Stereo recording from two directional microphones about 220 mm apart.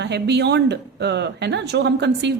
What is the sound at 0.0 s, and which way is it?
A woman's voice, 50° right (ahead or behind).